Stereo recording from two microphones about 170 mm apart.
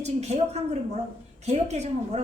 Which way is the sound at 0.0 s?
40° right (ahead or behind).